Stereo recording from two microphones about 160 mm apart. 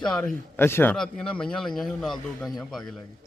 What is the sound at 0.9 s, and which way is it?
A man's voice, 5° left (ahead or behind).